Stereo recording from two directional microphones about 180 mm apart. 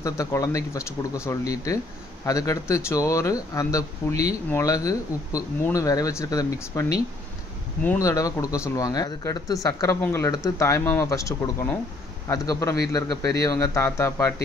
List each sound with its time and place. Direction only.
0.0 s speech: 20° left (ahead or behind)